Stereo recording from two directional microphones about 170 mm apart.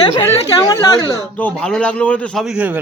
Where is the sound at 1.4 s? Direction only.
5° left (ahead or behind).